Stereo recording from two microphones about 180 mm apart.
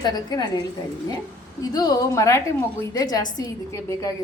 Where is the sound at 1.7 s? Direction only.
20° left (ahead or behind).